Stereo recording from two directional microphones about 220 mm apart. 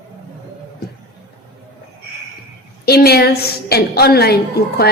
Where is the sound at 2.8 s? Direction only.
45° left (ahead or behind).